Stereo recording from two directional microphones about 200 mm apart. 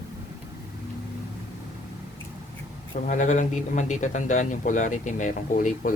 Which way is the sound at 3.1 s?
40° left (ahead or behind).